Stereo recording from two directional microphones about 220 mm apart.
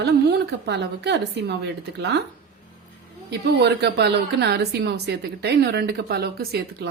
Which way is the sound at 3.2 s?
50° right (ahead or behind).